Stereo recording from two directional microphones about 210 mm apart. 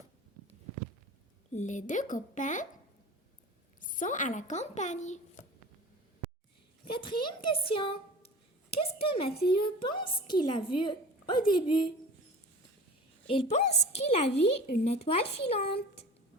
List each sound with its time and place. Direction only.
1.5 s speech: 35° left (ahead or behind)
3.8 s speech: 40° left (ahead or behind)
6.8 s a woman's voice: 20° left (ahead or behind)
13.3 s a woman's voice: 30° left (ahead or behind)